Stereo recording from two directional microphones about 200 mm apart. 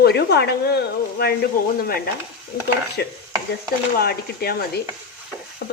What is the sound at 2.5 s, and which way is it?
Speech, 50° left (ahead or behind).